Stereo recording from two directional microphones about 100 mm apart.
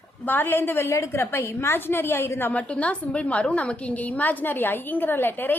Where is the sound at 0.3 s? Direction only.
20° left (ahead or behind).